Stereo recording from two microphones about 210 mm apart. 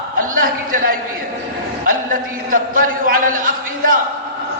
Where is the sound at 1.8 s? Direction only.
40° right (ahead or behind).